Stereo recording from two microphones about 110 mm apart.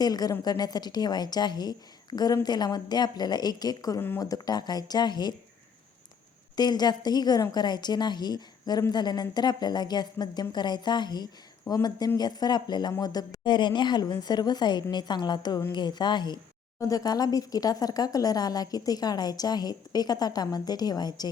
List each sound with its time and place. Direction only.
0.0 s a woman's voice: 35° left (ahead or behind)
6.6 s a woman's voice: 40° left (ahead or behind)